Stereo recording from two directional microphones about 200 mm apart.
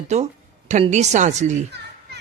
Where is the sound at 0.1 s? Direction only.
35° right (ahead or behind).